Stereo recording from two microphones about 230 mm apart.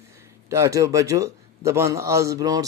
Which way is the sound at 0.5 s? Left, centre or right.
Centre.